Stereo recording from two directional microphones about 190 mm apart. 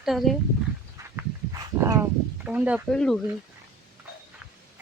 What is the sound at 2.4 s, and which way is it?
Speech, 5° right (ahead or behind).